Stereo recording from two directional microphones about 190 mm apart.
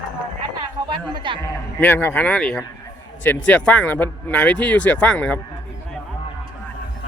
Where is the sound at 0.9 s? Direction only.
25° right (ahead or behind).